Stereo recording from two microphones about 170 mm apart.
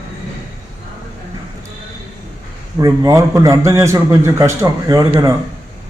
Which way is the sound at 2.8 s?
20° right (ahead or behind).